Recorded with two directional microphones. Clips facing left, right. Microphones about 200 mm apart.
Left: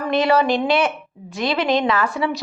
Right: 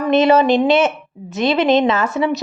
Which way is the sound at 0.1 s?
20° right (ahead or behind).